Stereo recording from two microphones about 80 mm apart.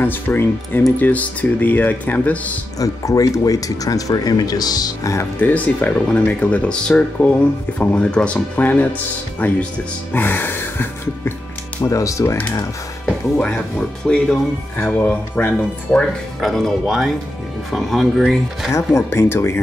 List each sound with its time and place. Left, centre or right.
0.0 s speech: left
2.8 s speech: left
5.4 s speech: centre
11.8 s speech: left
14.0 s speech: centre
16.3 s speech: centre
18.7 s speech: left